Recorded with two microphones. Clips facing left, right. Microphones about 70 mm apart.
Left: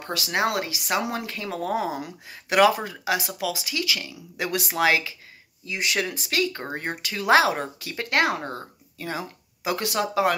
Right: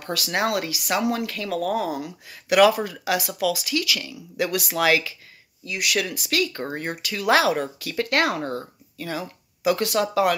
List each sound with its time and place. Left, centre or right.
0.0 s speech: left